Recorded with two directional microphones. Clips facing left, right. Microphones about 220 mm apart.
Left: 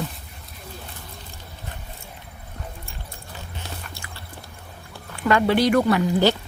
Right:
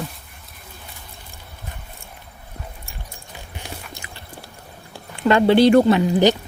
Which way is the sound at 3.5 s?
15° right (ahead or behind).